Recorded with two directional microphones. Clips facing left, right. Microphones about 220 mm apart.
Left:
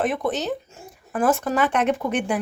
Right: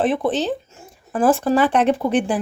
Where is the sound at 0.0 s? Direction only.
30° right (ahead or behind).